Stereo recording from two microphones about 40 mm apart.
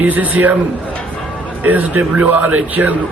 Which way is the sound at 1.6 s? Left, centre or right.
Right.